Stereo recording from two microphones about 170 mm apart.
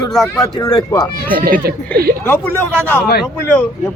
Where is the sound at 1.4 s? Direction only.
55° right (ahead or behind).